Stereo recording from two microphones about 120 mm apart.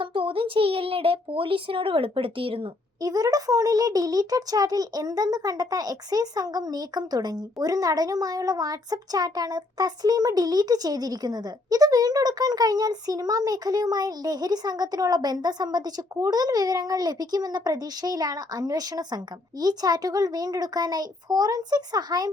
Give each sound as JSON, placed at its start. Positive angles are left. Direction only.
{"t": 0.0, "sound": "speech", "side_deg": -45}
{"t": 3.0, "sound": "a child's voice", "side_deg": -30}